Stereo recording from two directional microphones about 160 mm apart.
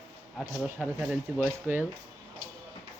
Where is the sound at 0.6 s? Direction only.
10° right (ahead or behind).